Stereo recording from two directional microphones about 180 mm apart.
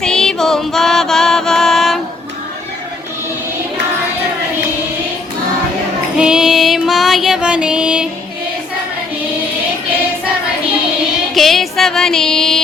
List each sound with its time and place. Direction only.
0.0 s music: 5° left (ahead or behind)
6.1 s music: 5° right (ahead or behind)
11.3 s female singing: centre (ahead or behind)